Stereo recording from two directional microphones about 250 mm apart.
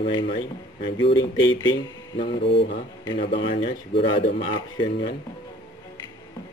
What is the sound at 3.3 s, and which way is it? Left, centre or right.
Speech, left.